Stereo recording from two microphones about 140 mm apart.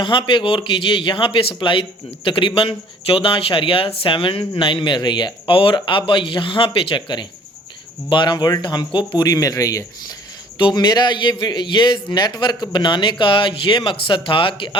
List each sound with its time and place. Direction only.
0.0 s speech: 35° left (ahead or behind)